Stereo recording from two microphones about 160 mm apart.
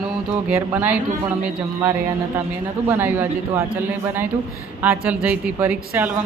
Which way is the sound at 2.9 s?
10° right (ahead or behind).